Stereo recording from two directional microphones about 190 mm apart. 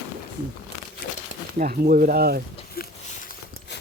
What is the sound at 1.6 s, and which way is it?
Speech, 50° right (ahead or behind).